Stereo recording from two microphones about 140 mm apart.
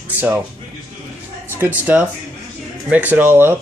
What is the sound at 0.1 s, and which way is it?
Speech, 15° right (ahead or behind).